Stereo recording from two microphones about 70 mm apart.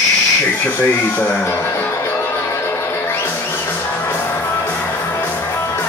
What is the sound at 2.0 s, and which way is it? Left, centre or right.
Music, left.